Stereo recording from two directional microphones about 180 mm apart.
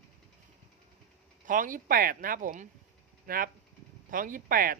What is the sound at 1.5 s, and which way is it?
A man's voice, 50° right (ahead or behind).